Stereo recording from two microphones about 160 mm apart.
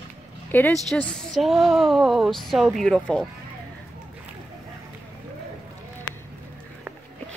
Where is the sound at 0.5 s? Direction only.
10° left (ahead or behind).